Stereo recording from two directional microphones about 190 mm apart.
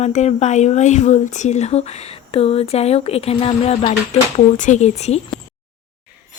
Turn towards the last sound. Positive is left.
turn(degrees=35)  # may be behind; listen again after turning